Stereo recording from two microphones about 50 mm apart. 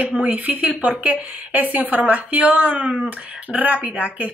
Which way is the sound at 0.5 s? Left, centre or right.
Right.